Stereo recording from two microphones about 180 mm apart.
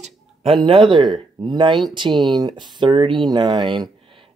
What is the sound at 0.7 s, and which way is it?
Speech, 25° right (ahead or behind).